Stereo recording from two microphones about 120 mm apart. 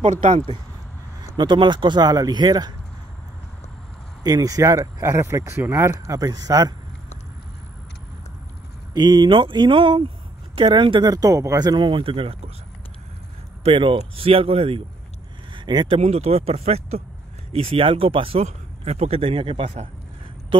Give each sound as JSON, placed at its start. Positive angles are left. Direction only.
{"t": 1.3, "sound": "speech", "side_deg": -40}
{"t": 4.2, "sound": "speech", "side_deg": -30}
{"t": 8.9, "sound": "speech", "side_deg": -35}
{"t": 13.7, "sound": "speech", "side_deg": -45}
{"t": 15.5, "sound": "speech", "side_deg": -40}
{"t": 16.0, "sound": "speech", "side_deg": -60}